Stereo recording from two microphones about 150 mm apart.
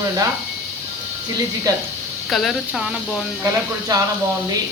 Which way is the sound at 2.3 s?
Centre (ahead or behind).